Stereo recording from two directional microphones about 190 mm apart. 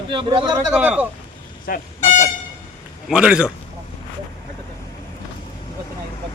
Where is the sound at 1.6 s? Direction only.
45° left (ahead or behind).